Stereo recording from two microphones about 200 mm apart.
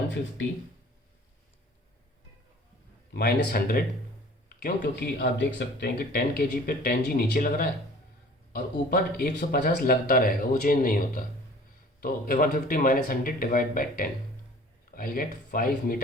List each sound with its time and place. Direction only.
3.1 s speech: 55° left (ahead or behind)